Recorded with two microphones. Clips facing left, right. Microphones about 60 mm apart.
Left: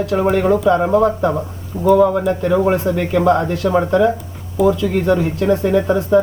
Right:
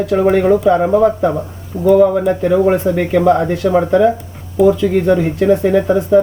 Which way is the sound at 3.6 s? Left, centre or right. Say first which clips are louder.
Right 3 dB; centre.